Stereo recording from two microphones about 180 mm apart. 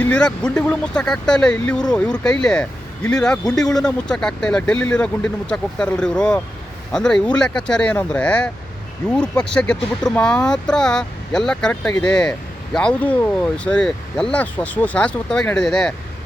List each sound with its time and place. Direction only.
0.0 s speech: 5° left (ahead or behind)